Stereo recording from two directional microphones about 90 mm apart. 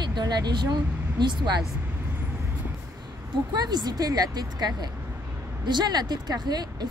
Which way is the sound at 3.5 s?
50° right (ahead or behind).